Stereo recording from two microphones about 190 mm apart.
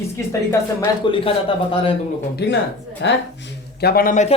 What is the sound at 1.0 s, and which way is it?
Speech, 25° left (ahead or behind).